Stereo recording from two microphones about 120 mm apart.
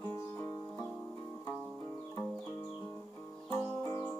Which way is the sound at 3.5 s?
25° left (ahead or behind).